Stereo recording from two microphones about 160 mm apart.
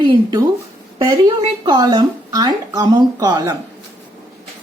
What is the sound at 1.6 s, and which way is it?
Speech, 25° right (ahead or behind).